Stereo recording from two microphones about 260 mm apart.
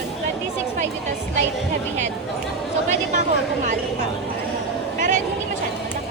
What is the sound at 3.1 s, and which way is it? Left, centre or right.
Speech, right.